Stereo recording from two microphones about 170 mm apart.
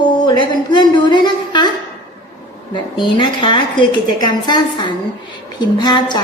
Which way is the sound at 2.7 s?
30° left (ahead or behind).